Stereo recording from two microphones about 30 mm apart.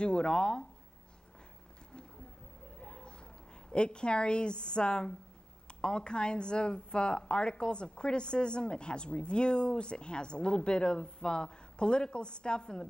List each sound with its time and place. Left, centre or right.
0.0 s a woman's voice: left
2.8 s a sound: left
3.7 s a woman's voice: left